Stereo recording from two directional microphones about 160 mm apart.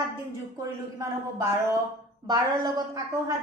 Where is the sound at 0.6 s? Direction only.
20° right (ahead or behind).